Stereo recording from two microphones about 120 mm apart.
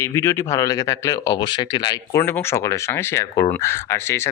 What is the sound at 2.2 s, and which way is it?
A man's voice, 20° left (ahead or behind).